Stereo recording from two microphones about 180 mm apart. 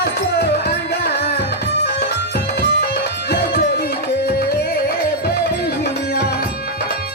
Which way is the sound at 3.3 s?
65° left (ahead or behind).